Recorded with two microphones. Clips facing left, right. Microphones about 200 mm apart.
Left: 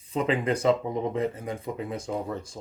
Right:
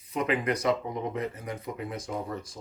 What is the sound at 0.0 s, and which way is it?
Speech, 30° left (ahead or behind).